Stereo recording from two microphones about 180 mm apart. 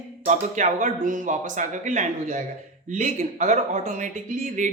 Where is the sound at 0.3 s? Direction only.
45° right (ahead or behind).